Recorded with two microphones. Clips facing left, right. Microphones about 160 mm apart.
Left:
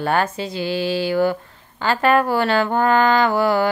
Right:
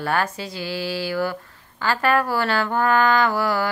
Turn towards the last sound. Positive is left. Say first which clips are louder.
# left 4 dB
turn(degrees=20)  # may be behind; listen again after turning